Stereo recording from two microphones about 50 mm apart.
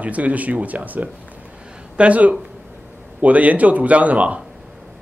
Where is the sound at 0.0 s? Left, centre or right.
Right.